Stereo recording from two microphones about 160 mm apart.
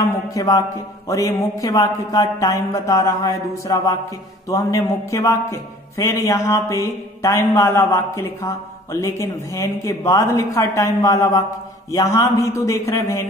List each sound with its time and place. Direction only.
0.0 s a man's voice: 20° left (ahead or behind)